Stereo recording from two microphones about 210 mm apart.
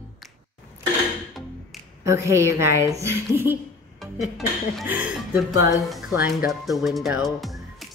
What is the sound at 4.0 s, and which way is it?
Speech, centre (ahead or behind).